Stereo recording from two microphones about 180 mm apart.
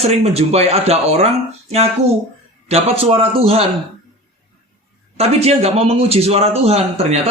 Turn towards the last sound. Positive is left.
turn(degrees=-35)  # may be behind; listen again after turning